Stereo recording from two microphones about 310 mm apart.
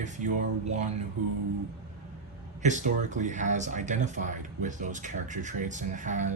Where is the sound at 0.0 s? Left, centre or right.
Right.